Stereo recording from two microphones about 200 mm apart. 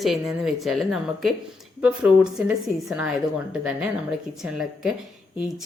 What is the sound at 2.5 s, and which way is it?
A woman's voice, centre (ahead or behind).